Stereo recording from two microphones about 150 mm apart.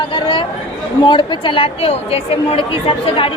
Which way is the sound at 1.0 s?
30° left (ahead or behind).